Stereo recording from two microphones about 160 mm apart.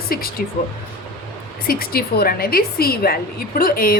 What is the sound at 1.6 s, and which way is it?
A woman's voice, 70° left (ahead or behind).